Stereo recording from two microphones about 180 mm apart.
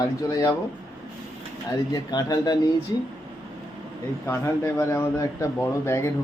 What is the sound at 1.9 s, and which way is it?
Speech, 20° left (ahead or behind).